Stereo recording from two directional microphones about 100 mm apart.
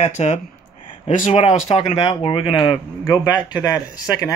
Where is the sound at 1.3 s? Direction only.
75° left (ahead or behind); by 3.2 s 55° left (ahead or behind).